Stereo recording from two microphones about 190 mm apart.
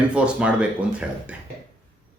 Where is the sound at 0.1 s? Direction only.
5° right (ahead or behind).